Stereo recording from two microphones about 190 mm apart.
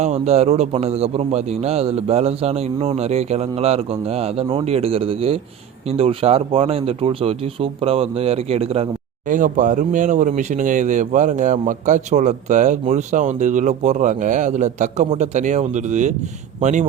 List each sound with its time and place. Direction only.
0.0 s speech: 35° right (ahead or behind)